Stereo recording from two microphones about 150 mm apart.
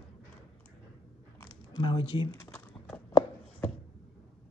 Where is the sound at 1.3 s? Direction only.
30° left (ahead or behind).